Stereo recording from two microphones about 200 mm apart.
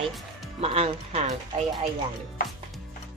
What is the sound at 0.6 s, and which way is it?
Speech, 30° right (ahead or behind).